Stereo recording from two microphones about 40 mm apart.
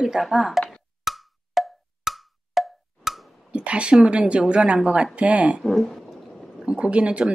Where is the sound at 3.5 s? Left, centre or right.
Right.